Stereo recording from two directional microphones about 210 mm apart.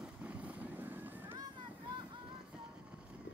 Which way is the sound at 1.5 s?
20° right (ahead or behind).